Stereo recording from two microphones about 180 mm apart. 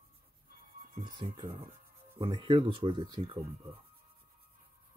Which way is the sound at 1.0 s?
25° right (ahead or behind).